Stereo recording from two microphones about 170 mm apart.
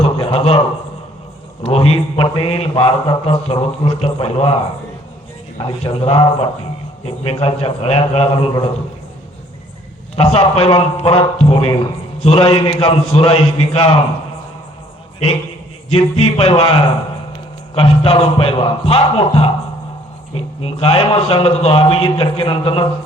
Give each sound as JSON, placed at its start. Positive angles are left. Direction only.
{"t": 0.0, "sound": "a sound", "side_deg": 35}
{"t": 1.6, "sound": "speech", "side_deg": 35}
{"t": 5.5, "sound": "speech", "side_deg": 35}
{"t": 10.2, "sound": "speech", "side_deg": 35}
{"t": 15.9, "sound": "speech", "side_deg": 35}